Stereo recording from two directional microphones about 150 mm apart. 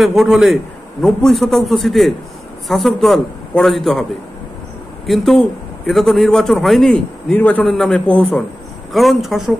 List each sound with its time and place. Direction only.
0.0 s a man's voice: centre (ahead or behind)
5.0 s a man's voice: centre (ahead or behind)